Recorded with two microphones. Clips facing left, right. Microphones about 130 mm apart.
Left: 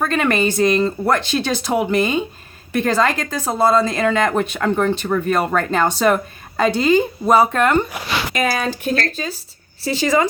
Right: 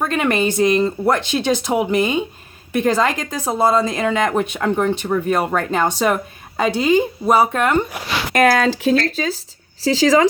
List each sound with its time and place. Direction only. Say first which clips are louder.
0.0 s a woman's voice: even; 15° right (ahead or behind)
8.3 s speech: right 8 dB; 65° right (ahead or behind); by 10.2 s 90° right